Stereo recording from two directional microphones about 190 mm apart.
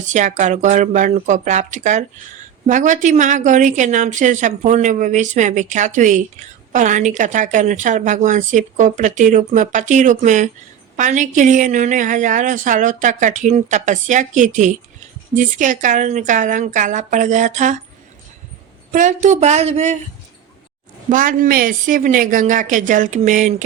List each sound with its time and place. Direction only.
0.1 s a woman's voice: 40° right (ahead or behind)
18.9 s a woman's voice: 45° right (ahead or behind)
21.1 s speech: 45° right (ahead or behind)